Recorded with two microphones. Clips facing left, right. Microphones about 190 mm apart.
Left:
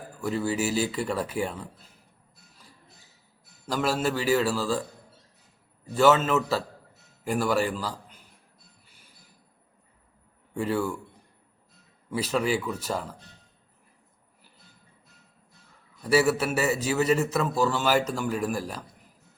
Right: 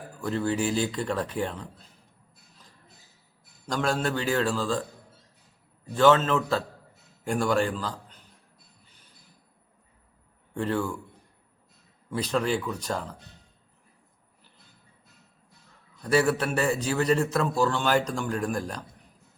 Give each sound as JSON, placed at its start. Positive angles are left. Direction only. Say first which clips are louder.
{"t": 0.2, "sound": "speech", "louder": "even", "side_deg": 5}
{"t": 3.7, "sound": "speech", "louder": "left 1 dB", "side_deg": 5}
{"t": 5.9, "sound": "speech", "louder": "even", "side_deg": 10}
{"t": 8.9, "sound": "music", "louder": "left 1 dB", "side_deg": 10}
{"t": 10.5, "sound": "speech", "louder": "left 1 dB", "side_deg": 10}
{"t": 12.1, "sound": "speech", "louder": "even", "side_deg": 5}
{"t": 16.0, "sound": "a man's voice", "louder": "left 1 dB", "side_deg": 5}